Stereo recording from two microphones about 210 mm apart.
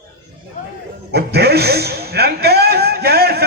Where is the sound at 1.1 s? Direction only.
50° right (ahead or behind).